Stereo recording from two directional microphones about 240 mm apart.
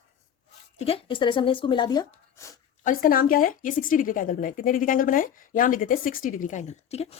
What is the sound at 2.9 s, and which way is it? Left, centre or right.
Speech, left.